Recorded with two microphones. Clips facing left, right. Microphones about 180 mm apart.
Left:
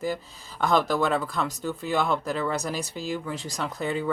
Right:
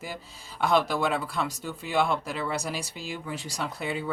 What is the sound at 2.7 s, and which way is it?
Speech, 40° left (ahead or behind).